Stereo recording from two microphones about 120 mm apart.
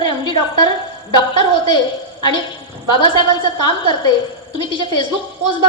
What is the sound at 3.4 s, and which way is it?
Speech, 40° left (ahead or behind).